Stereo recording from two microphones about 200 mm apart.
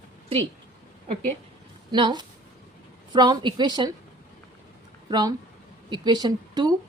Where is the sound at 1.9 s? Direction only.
20° right (ahead or behind).